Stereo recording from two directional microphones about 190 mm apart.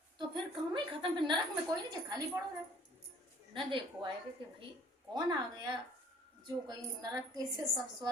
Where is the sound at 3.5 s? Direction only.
25° right (ahead or behind).